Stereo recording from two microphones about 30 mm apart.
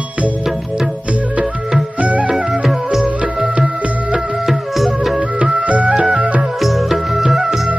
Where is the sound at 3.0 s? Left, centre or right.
Right.